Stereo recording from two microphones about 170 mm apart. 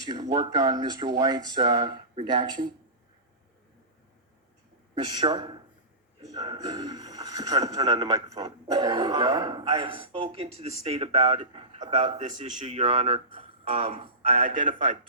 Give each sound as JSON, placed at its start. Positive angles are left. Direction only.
{"t": 0.0, "sound": "speech", "side_deg": -25}
{"t": 4.9, "sound": "a man's voice", "side_deg": -25}
{"t": 8.3, "sound": "speech", "side_deg": -40}
{"t": 8.6, "sound": "speech", "side_deg": -25}
{"t": 12.4, "sound": "speech", "side_deg": -40}